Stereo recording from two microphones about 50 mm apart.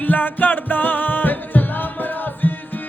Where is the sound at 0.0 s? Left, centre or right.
Left.